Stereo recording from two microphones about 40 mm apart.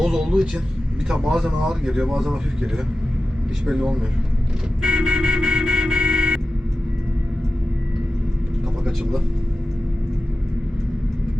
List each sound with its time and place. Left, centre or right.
0.0 s vehicle: centre
1.0 s speech: centre
4.9 s vehicle: right